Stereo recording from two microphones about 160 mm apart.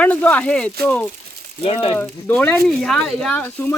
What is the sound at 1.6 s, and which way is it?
Speech, 35° left (ahead or behind).